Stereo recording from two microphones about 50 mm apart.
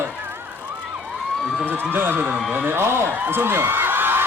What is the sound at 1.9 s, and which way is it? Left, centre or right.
A man's voice, right.